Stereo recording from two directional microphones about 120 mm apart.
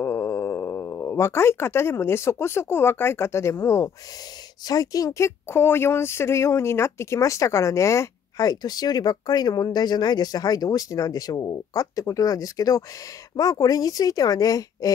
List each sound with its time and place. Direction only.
0.0 s speech: 25° left (ahead or behind)